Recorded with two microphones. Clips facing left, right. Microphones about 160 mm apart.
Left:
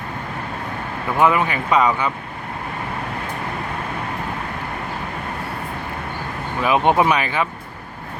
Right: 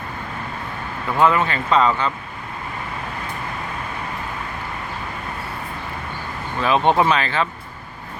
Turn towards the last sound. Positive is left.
turn(degrees=15)  # may be behind; listen again after turning